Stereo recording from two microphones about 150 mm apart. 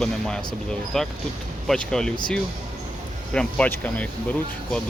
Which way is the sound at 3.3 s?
5° left (ahead or behind).